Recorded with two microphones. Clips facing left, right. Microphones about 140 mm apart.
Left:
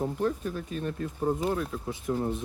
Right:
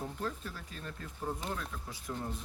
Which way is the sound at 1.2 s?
45° left (ahead or behind).